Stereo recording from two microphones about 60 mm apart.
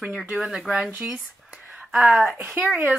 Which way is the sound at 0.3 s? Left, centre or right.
Centre.